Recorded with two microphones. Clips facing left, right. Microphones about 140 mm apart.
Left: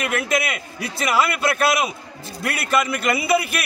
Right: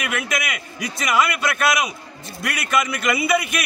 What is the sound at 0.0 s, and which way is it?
A man's voice, 30° left (ahead or behind).